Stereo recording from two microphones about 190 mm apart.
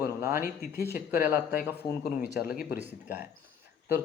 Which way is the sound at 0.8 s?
10° right (ahead or behind).